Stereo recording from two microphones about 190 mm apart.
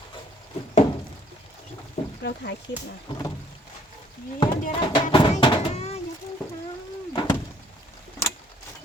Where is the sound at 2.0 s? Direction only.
35° left (ahead or behind).